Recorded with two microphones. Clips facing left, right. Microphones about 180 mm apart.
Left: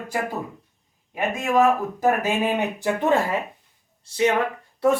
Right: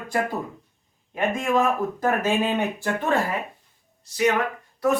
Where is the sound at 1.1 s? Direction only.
5° left (ahead or behind).